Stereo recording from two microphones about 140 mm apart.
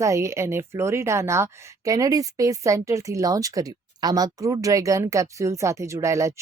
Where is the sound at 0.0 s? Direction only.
20° right (ahead or behind).